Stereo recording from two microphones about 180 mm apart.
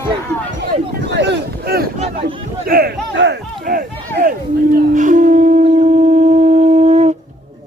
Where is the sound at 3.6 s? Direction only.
50° right (ahead or behind).